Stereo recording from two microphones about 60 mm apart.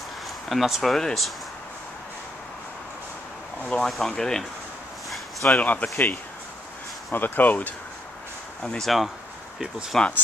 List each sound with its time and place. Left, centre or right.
0.5 s speech: centre
3.6 s speech: centre
3.9 s speech: centre
5.5 s speech: left
8.6 s speech: centre
9.9 s speech: centre